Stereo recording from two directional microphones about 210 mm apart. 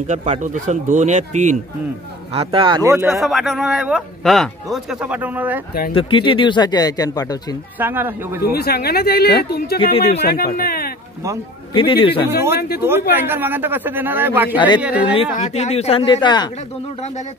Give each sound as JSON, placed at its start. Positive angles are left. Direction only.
{"t": 0.0, "sound": "speech", "side_deg": -35}
{"t": 2.3, "sound": "speech", "side_deg": -25}
{"t": 3.1, "sound": "a man's voice", "side_deg": 0}
{"t": 5.9, "sound": "speech", "side_deg": 25}
{"t": 7.8, "sound": "speech", "side_deg": -10}
{"t": 8.4, "sound": "speech", "side_deg": 45}
{"t": 9.8, "sound": "speech", "side_deg": 25}
{"t": 10.2, "sound": "speech", "side_deg": 45}
{"t": 11.7, "sound": "speech", "side_deg": 25}
{"t": 12.5, "sound": "speech", "side_deg": 50}
{"t": 13.1, "sound": "speech", "side_deg": -10}
{"t": 14.5, "sound": "speech", "side_deg": 20}
{"t": 14.8, "sound": "speech", "side_deg": -5}
{"t": 15.1, "sound": "speech", "side_deg": 30}